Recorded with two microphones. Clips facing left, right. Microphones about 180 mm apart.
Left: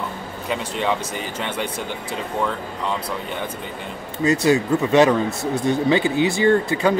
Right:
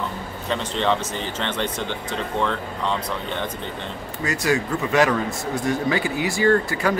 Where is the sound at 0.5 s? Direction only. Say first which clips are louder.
Right 1 dB; 10° left (ahead or behind).